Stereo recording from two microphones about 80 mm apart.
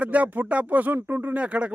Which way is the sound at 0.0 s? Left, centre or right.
Centre.